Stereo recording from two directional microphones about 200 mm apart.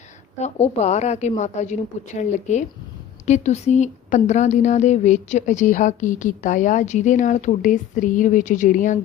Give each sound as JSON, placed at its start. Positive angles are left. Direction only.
{"t": 0.3, "sound": "a woman's voice", "side_deg": 35}